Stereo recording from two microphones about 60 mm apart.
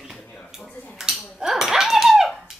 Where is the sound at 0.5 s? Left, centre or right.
Centre.